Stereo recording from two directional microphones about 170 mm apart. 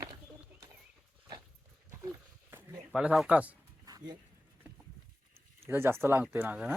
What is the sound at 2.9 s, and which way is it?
Speech, 5° right (ahead or behind).